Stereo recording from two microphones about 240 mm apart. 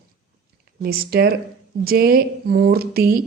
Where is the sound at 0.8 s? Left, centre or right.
Right.